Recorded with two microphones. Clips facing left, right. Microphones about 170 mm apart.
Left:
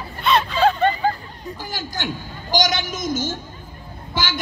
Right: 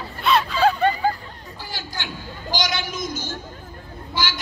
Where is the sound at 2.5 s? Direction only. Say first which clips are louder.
Left 5 dB; 50° left (ahead or behind).